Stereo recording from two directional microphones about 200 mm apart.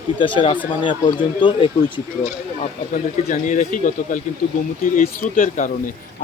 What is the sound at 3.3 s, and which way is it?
Speech, 40° left (ahead or behind).